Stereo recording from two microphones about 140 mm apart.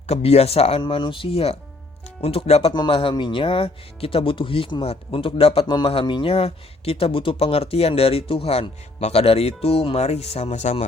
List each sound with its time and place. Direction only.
0.1 s speech: 50° left (ahead or behind)